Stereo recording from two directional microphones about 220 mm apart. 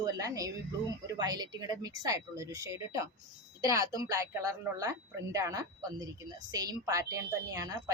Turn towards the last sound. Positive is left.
turn(degrees=-15)  # may be behind; listen again after turning